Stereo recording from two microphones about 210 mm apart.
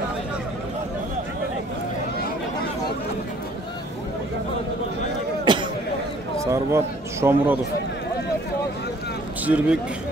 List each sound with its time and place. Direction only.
5.4 s a sound: 20° right (ahead or behind)
6.3 s speech: 15° right (ahead or behind)
9.5 s speech: 5° right (ahead or behind)